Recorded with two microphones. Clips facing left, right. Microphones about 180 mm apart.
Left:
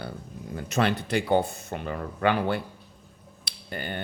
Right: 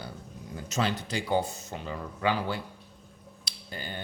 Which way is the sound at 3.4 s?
60° left (ahead or behind).